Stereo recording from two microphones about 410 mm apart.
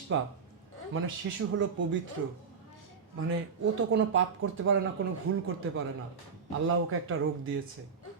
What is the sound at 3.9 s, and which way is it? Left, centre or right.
Speech, right.